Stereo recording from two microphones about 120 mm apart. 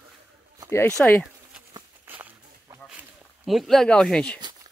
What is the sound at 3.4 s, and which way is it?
Speech, centre (ahead or behind).